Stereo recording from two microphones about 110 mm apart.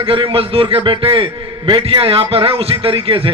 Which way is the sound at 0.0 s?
55° right (ahead or behind).